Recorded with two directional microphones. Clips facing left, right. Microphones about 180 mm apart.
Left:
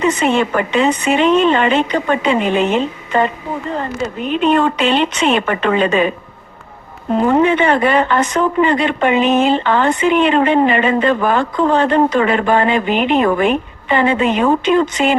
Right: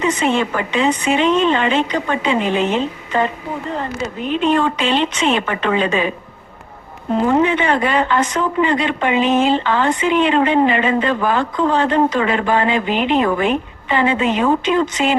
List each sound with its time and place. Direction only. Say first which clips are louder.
0.2 s speech: left 3 dB; 55° left (ahead or behind)
4.3 s speech: left 2 dB; 60° left (ahead or behind)
7.3 s speech: left 3 dB; 50° left (ahead or behind)